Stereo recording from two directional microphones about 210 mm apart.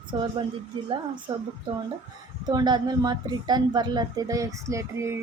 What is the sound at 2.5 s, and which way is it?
A woman's voice, 20° right (ahead or behind).